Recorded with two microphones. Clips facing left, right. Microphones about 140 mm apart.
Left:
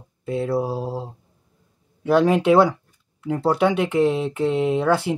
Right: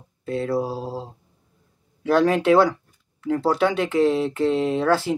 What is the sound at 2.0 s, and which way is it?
Mantra, 5° left (ahead or behind).